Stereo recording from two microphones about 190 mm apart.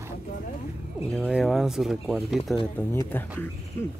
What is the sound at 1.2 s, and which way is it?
Speech, 5° right (ahead or behind).